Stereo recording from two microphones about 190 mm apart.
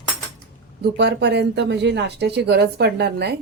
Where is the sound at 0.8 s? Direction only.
60° right (ahead or behind).